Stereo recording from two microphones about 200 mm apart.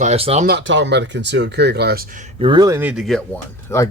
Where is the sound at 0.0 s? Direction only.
30° right (ahead or behind).